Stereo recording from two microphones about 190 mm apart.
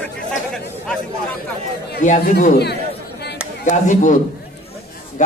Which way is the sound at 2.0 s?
40° left (ahead or behind).